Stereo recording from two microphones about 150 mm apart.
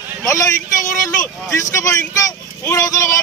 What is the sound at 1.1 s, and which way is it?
Speech, 20° left (ahead or behind).